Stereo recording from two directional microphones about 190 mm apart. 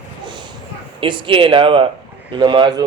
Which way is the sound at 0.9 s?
25° right (ahead or behind).